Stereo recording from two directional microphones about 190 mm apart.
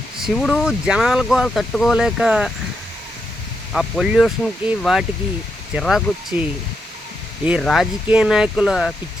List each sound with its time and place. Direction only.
0.2 s speech: centre (ahead or behind)
3.7 s speech: centre (ahead or behind)
7.6 s speech: centre (ahead or behind)